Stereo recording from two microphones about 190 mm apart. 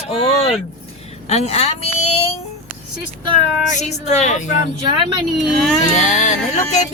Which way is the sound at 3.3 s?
35° left (ahead or behind).